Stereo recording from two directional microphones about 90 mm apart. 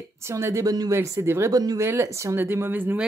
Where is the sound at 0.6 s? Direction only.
45° right (ahead or behind).